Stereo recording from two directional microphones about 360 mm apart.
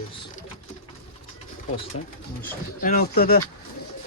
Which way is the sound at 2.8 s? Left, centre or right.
Left.